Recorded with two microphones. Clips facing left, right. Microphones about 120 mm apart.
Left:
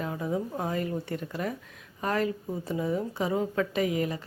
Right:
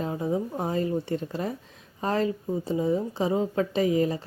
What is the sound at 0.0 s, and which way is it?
A woman's voice, 25° right (ahead or behind).